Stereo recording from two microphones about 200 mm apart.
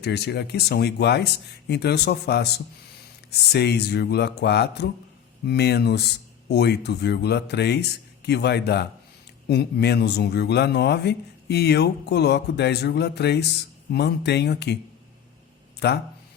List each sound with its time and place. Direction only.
0.0 s speech: 55° left (ahead or behind)
15.8 s speech: 55° left (ahead or behind)